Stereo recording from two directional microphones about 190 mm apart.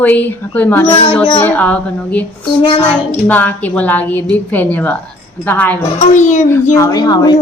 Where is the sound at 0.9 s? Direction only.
30° left (ahead or behind).